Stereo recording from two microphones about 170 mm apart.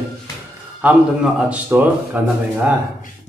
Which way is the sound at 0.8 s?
10° right (ahead or behind).